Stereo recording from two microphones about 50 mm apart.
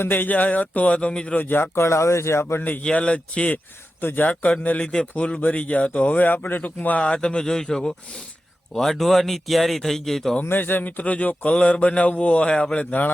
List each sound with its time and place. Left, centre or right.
0.1 s speech: left
1.4 s speech: left
1.7 s speech: left
2.6 s speech: left
2.9 s speech: left
4.0 s speech: left
4.3 s speech: left
4.8 s speech: centre; by 7.0 s left
7.0 s speech: centre
10.4 s speech: left; by 12.9 s centre